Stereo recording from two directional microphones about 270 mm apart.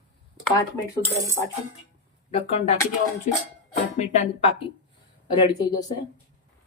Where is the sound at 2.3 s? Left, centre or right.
Left.